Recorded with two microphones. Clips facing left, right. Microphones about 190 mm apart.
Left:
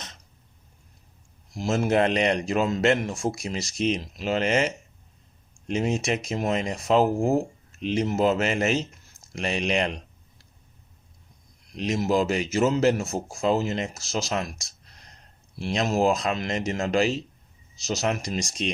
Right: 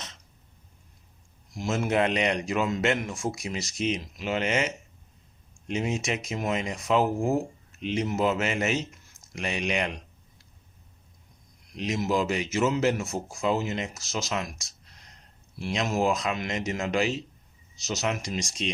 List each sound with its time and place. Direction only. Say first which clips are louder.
1.5 s a man's voice: left 3 dB; 35° left (ahead or behind)
11.8 s a man's voice: left 3 dB; 35° left (ahead or behind)